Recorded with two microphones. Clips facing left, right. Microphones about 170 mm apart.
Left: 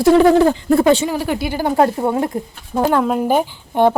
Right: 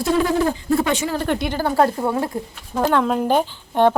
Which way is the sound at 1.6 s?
20° left (ahead or behind).